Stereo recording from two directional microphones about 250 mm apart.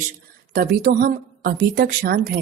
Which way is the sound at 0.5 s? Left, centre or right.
Right.